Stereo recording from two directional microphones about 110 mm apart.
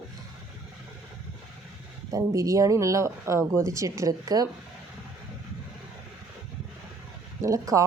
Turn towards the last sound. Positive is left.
turn(degrees=-30)  # may be behind; listen again after turning